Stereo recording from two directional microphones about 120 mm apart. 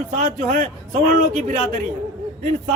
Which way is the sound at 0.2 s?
90° right.